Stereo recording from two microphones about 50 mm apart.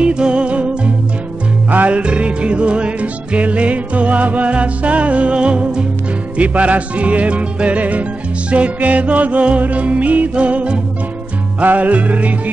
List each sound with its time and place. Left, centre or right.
0.0 s music: centre